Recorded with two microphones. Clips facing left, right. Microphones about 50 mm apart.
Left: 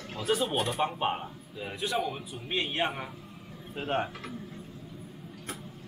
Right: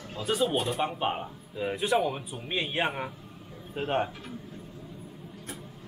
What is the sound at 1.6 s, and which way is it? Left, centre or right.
A man's voice, right.